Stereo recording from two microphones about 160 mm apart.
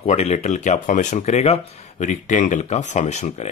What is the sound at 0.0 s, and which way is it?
Speech, 40° left (ahead or behind).